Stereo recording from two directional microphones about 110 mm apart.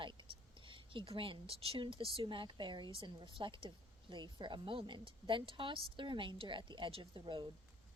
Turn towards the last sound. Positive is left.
turn(degrees=-50)  # may be behind; listen again after turning